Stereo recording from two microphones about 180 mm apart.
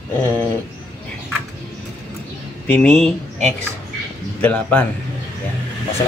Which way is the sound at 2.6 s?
5° left (ahead or behind).